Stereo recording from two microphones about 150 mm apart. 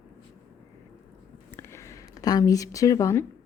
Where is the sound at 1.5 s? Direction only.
15° left (ahead or behind).